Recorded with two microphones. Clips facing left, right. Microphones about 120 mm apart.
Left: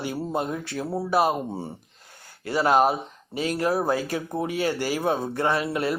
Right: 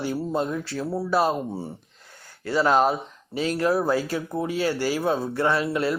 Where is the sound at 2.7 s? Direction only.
15° left (ahead or behind).